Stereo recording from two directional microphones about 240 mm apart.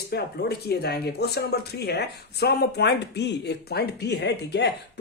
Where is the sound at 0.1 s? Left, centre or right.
Left.